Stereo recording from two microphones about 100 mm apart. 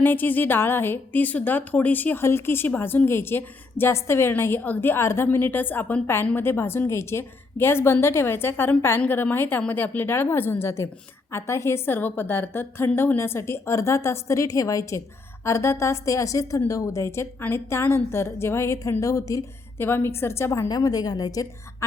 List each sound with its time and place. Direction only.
0.0 s a woman's voice: 20° left (ahead or behind)
19.8 s a woman's voice: 20° left (ahead or behind)
20.7 s a woman's voice: 40° left (ahead or behind)